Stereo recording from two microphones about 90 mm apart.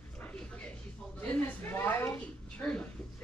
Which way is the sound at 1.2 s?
20° left (ahead or behind).